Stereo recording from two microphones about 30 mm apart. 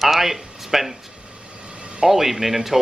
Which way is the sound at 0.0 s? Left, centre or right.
Centre.